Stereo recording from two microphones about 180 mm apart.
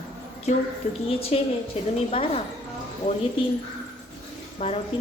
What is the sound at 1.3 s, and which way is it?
A woman's voice, 35° left (ahead or behind).